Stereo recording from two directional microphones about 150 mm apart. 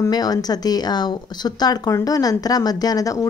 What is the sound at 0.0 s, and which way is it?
Speech, 25° left (ahead or behind).